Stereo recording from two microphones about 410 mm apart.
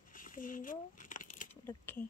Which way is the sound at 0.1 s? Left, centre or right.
Centre.